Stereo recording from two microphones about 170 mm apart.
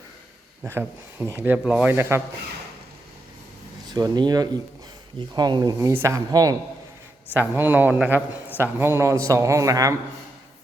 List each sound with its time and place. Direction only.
0.7 s speech: 15° right (ahead or behind)
3.9 s speech: 25° right (ahead or behind)
7.3 s speech: 10° right (ahead or behind)